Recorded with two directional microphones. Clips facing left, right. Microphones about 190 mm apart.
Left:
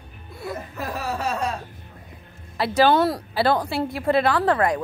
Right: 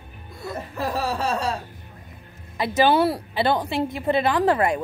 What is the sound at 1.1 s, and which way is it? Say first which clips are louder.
Speech: right 1 dB; 30° right (ahead or behind).